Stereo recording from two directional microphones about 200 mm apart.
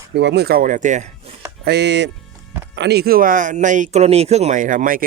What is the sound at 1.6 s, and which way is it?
Speech, 55° right (ahead or behind).